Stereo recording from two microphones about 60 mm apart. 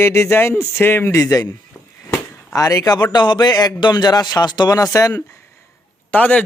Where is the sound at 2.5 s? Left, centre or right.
Left.